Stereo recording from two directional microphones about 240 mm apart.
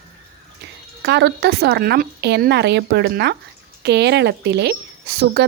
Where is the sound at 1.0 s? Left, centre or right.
Right.